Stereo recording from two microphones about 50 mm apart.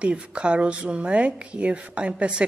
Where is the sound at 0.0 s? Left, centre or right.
Right.